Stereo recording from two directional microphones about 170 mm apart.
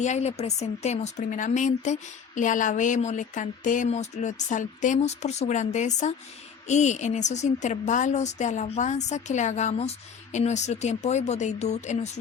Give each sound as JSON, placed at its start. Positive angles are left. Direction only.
{"t": 0.0, "sound": "a woman's voice", "side_deg": 40}